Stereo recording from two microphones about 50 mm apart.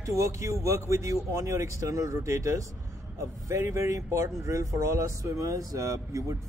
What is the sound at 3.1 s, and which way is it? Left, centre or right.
A man's voice, right.